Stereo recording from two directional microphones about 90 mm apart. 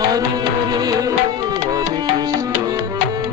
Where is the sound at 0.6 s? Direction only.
45° right (ahead or behind).